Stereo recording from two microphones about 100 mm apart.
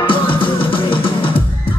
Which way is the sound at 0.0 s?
60° left (ahead or behind).